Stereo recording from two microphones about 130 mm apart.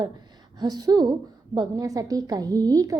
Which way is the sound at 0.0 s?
35° right (ahead or behind).